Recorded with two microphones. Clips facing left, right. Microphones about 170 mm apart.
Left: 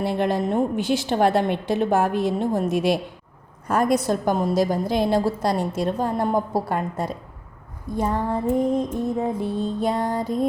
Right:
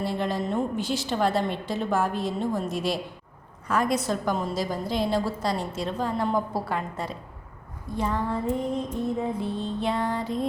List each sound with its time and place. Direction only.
0.0 s a woman's voice: 60° left (ahead or behind)
3.7 s a woman's voice: 45° left (ahead or behind)